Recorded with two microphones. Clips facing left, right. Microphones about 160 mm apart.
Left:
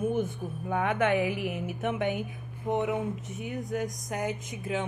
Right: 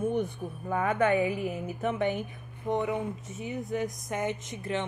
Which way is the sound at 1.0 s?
90° left.